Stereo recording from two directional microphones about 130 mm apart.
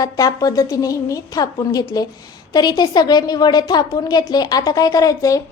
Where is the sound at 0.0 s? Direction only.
25° left (ahead or behind).